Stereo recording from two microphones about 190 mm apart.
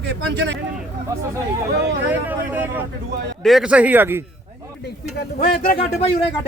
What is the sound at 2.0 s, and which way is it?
A man's voice, 10° right (ahead or behind).